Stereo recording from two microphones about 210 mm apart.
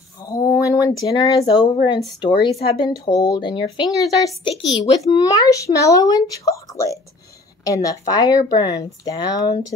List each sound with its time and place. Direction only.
0.3 s a woman's voice: 15° left (ahead or behind)